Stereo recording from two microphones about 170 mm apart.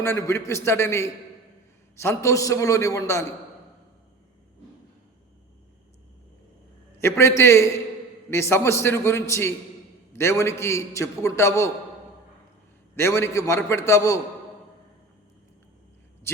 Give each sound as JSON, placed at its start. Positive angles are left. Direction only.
{"t": 0.0, "sound": "a man's voice", "side_deg": 15}
{"t": 7.0, "sound": "a man's voice", "side_deg": 15}
{"t": 13.0, "sound": "a man's voice", "side_deg": 15}
{"t": 16.3, "sound": "a man's voice", "side_deg": 15}